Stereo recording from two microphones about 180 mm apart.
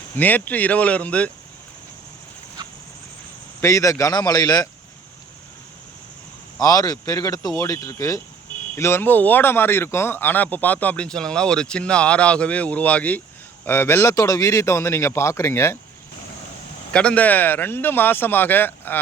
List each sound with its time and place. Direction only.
0.2 s speech: 10° left (ahead or behind)
3.6 s speech: 15° left (ahead or behind)
6.6 s speech: 20° left (ahead or behind)
16.9 s speech: 5° left (ahead or behind)